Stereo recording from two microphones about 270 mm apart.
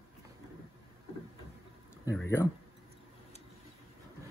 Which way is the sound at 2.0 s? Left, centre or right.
Centre.